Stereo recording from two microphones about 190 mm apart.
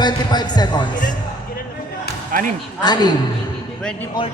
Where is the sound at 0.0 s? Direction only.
20° left (ahead or behind).